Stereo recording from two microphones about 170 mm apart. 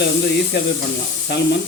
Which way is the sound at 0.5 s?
75° left (ahead or behind).